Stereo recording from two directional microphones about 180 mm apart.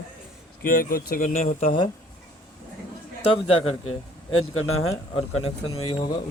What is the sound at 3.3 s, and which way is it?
Speech, 35° left (ahead or behind).